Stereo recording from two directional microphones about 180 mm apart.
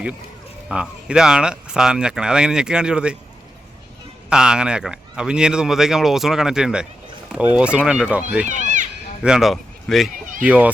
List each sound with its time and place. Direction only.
0.7 s speech: 5° right (ahead or behind)
4.3 s speech: 5° right (ahead or behind)
8.4 s children playing: 45° right (ahead or behind)
9.2 s speech: 5° right (ahead or behind)